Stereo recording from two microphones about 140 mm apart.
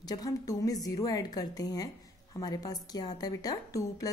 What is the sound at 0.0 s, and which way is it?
A woman's voice, 25° left (ahead or behind).